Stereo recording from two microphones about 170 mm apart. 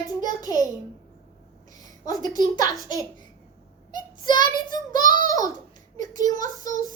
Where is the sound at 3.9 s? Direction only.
25° left (ahead or behind).